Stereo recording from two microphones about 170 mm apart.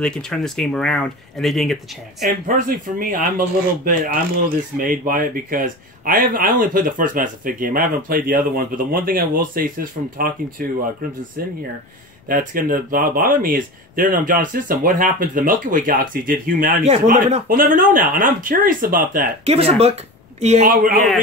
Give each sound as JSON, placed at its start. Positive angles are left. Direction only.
{"t": 0.0, "sound": "speech", "side_deg": 5}
{"t": 2.2, "sound": "speech", "side_deg": -55}
{"t": 12.3, "sound": "speech", "side_deg": -55}
{"t": 16.8, "sound": "speech", "side_deg": -40}
{"t": 19.4, "sound": "speech", "side_deg": -35}
{"t": 20.6, "sound": "speech", "side_deg": -55}